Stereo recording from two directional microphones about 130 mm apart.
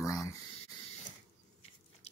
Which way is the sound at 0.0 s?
25° left (ahead or behind).